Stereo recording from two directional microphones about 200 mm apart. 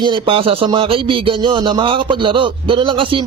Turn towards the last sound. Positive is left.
turn(degrees=-25)  # may be behind; listen again after turning